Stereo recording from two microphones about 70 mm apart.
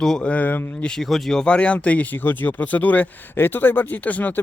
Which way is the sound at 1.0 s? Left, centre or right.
Centre.